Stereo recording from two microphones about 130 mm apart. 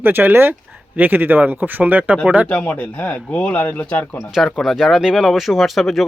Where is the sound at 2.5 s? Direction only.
10° left (ahead or behind).